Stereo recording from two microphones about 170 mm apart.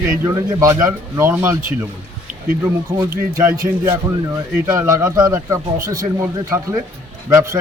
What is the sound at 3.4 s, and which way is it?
A man's voice, 15° right (ahead or behind).